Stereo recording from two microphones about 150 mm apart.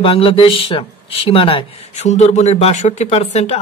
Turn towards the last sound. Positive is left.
turn(degrees=45)  # may be behind; listen again after turning